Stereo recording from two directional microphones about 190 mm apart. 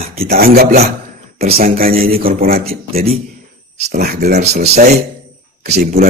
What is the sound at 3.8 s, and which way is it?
Speech, 55° right (ahead or behind).